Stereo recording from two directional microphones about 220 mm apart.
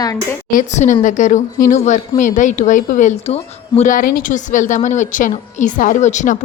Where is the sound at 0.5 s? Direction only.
35° left (ahead or behind).